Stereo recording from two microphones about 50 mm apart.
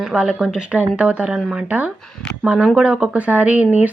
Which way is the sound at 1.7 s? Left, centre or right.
Right.